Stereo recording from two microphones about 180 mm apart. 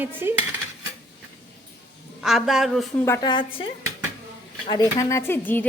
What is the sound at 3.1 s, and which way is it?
Speech, 25° left (ahead or behind).